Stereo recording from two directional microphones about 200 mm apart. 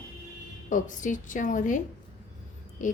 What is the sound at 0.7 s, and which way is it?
A woman's voice, 40° left (ahead or behind).